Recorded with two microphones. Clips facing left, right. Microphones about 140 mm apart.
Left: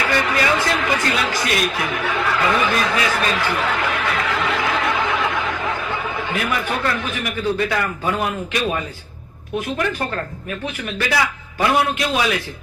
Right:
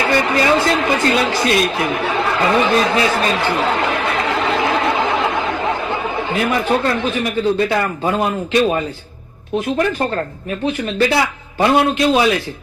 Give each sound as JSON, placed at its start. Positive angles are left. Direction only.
{"t": 0.0, "sound": "a man's voice", "side_deg": -25}